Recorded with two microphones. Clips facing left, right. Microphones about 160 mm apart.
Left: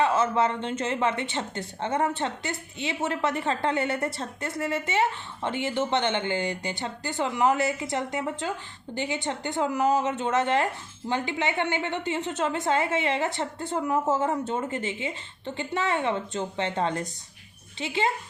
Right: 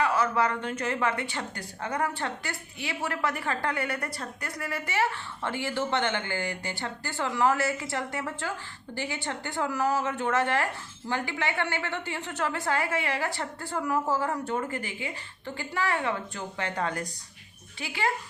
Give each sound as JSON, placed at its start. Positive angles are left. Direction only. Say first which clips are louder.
{"t": 0.0, "sound": "a woman's voice", "louder": "left 3 dB", "side_deg": 25}